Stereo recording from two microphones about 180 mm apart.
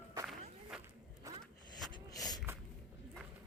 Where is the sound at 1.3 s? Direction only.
15° right (ahead or behind).